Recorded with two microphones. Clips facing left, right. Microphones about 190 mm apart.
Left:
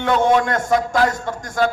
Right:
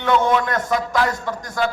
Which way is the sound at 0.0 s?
50° left (ahead or behind).